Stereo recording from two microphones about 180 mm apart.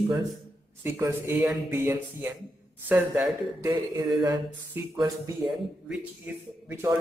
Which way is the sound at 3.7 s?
20° right (ahead or behind).